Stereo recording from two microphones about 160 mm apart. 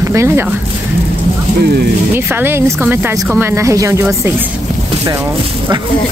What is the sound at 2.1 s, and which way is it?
Speech, 15° right (ahead or behind).